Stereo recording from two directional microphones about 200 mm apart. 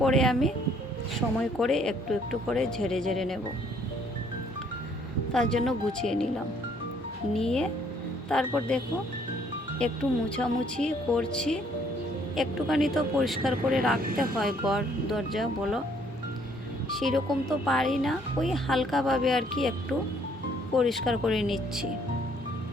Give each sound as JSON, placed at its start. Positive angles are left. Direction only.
{"t": 0.0, "sound": "speech", "side_deg": 5}
{"t": 1.5, "sound": "speech", "side_deg": 0}
{"t": 5.3, "sound": "speech", "side_deg": 5}
{"t": 7.3, "sound": "speech", "side_deg": 5}
{"t": 9.8, "sound": "speech", "side_deg": 5}
{"t": 14.0, "sound": "speech", "side_deg": -45}
{"t": 14.3, "sound": "speech", "side_deg": 0}
{"t": 17.0, "sound": "speech", "side_deg": 0}